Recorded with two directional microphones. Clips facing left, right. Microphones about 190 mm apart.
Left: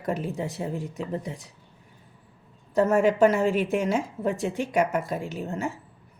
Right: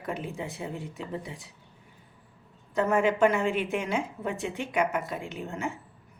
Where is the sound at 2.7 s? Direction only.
40° left (ahead or behind).